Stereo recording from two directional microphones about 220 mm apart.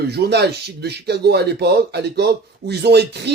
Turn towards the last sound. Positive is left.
turn(degrees=-50)  # may be behind; listen again after turning